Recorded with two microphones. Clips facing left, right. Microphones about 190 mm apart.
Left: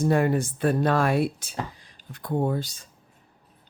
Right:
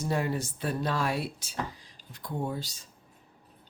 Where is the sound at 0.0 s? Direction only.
55° left (ahead or behind).